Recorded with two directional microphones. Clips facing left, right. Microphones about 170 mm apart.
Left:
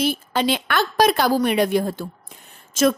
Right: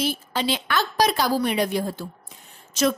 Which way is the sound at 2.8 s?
50° left (ahead or behind).